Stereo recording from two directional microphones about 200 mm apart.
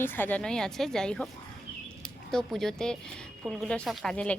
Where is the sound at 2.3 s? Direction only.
Centre (ahead or behind).